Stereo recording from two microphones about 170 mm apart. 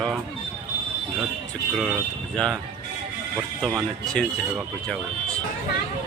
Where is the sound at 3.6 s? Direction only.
5° left (ahead or behind).